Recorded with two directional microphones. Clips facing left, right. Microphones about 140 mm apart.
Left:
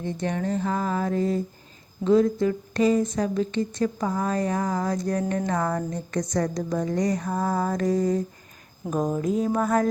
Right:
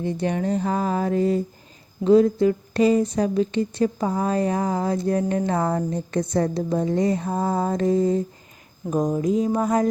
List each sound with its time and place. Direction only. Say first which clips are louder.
0.0 s mantra: right 4 dB; 30° right (ahead or behind)
2.0 s speech: right 4 dB; 30° right (ahead or behind)
8.8 s speech: right 3 dB; 20° left (ahead or behind)
9.2 s a sound: right 3 dB; centre (ahead or behind)
9.5 s speech: right 2 dB; 20° right (ahead or behind)